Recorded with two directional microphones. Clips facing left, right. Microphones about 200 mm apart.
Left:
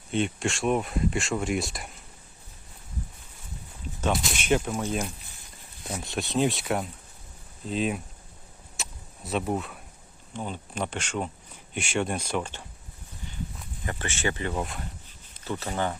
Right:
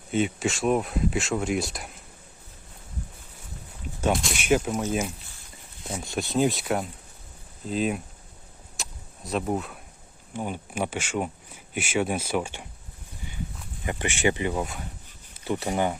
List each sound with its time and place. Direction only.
0.1 s speech: 5° right (ahead or behind)
4.1 s speech: centre (ahead or behind)
8.8 s a sound: centre (ahead or behind)
10.3 s speech: 10° right (ahead or behind)
13.8 s speech: 15° right (ahead or behind)
14.5 s speech: centre (ahead or behind)
15.4 s speech: 15° right (ahead or behind)